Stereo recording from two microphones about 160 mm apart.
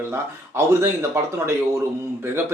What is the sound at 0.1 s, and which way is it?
Speech, 15° right (ahead or behind).